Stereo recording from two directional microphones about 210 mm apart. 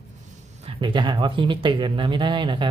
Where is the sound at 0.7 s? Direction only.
20° right (ahead or behind).